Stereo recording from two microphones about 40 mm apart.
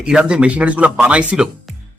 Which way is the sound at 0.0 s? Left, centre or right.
Right.